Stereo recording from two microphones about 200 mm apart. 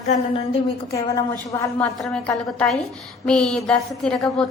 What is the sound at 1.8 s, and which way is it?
A woman's voice, 5° left (ahead or behind).